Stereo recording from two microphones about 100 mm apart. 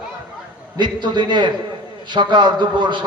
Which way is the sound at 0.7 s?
45° right (ahead or behind).